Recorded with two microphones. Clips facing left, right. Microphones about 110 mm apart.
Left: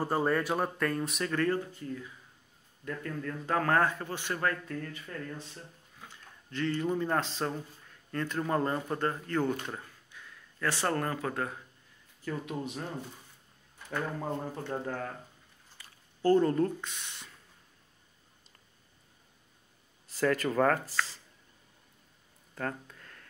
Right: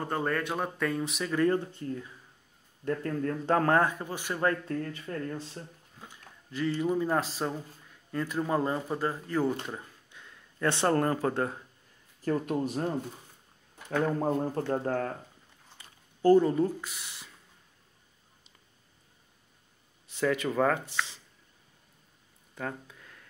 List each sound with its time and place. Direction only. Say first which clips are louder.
0.0 s speech: left 2 dB; 10° left (ahead or behind)
1.3 s a man's voice: right 5 dB; 20° right (ahead or behind)
4.5 s a man's voice: right 4 dB; 25° right (ahead or behind)
6.0 s speech: right 1 dB; 10° right (ahead or behind)
9.7 s speech: right 1 dB; 20° right (ahead or behind)
12.3 s speech: right 7 dB; 40° right (ahead or behind)
15.8 s speech: right 4 dB; 15° right (ahead or behind)
20.1 s speech: even; centre (ahead or behind)
22.6 s a sound: left 1 dB; 10° right (ahead or behind)